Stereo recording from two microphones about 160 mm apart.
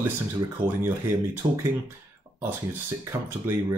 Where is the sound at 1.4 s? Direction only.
35° right (ahead or behind).